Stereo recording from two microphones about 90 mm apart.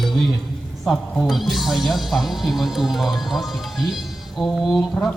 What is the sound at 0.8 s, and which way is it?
Speech, centre (ahead or behind).